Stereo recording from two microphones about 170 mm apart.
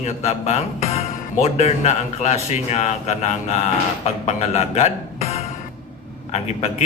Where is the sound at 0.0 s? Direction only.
40° left (ahead or behind).